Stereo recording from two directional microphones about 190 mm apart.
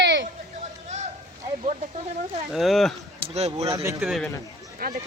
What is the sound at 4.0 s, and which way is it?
Speech, centre (ahead or behind).